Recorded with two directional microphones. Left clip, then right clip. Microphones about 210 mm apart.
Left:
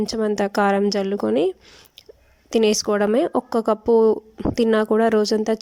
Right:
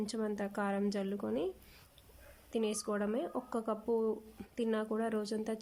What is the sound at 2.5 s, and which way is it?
Speech, 40° left (ahead or behind).